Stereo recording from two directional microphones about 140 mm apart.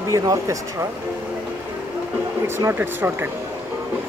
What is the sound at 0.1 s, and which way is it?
Speech, 25° right (ahead or behind).